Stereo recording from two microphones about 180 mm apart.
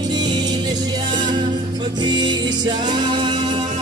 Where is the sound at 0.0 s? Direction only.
25° right (ahead or behind).